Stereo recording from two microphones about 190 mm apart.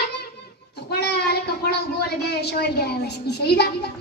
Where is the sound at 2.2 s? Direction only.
60° left (ahead or behind).